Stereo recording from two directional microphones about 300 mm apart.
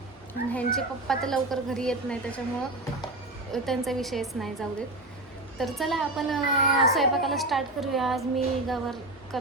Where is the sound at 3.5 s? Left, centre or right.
Centre.